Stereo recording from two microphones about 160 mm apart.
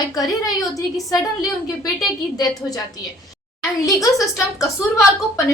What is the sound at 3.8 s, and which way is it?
A woman's voice, 20° left (ahead or behind).